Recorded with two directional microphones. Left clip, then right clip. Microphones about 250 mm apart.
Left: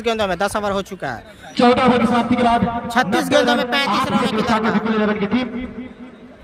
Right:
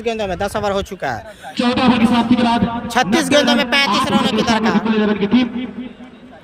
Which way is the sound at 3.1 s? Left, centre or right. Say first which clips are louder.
Right 2 dB; centre.